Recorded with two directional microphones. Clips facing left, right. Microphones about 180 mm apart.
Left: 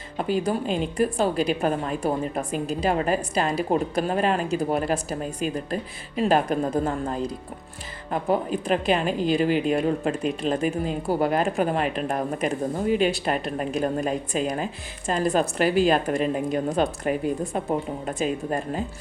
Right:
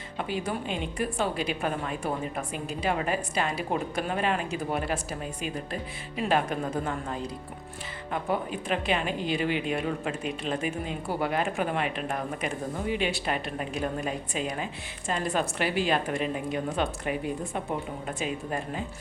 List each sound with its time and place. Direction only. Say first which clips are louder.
0.2 s a woman's voice: left 7 dB; 40° left (ahead or behind)